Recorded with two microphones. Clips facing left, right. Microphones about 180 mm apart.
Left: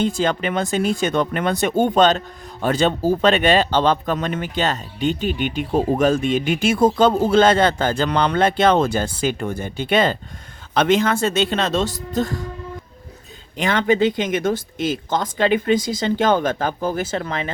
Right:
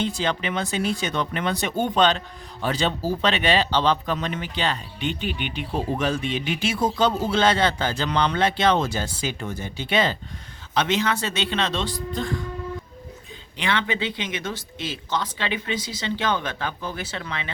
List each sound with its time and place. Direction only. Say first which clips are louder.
0.0 s speech: left 5 dB; 50° left (ahead or behind)
13.6 s speech: left 8 dB; 45° left (ahead or behind)